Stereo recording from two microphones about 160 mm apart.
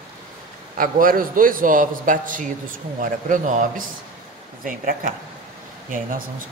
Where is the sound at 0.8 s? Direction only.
60° right (ahead or behind).